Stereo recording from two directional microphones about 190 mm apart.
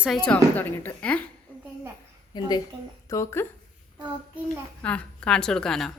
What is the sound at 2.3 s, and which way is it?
A woman's voice, 20° left (ahead or behind).